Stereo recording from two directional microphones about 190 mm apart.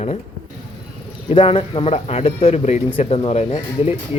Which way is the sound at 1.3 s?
30° left (ahead or behind).